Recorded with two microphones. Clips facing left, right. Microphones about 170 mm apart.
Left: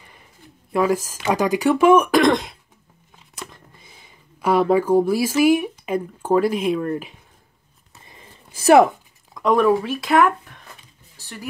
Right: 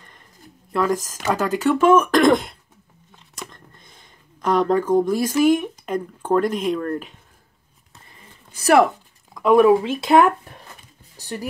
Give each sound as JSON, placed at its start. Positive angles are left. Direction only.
{"t": 0.7, "sound": "speech", "side_deg": 10}
{"t": 2.2, "sound": "throat clearing", "side_deg": 0}
{"t": 3.3, "sound": "speech", "side_deg": 5}
{"t": 8.1, "sound": "a sound", "side_deg": 20}
{"t": 9.3, "sound": "a sound", "side_deg": -5}
{"t": 9.6, "sound": "speech", "side_deg": -20}